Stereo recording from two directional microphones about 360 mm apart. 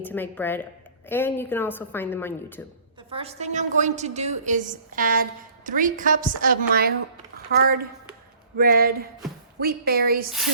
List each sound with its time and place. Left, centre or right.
0.0 s a woman's voice: centre
3.1 s a woman's voice: centre